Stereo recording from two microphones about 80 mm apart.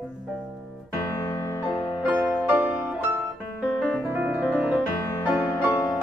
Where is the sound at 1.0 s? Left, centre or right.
Left.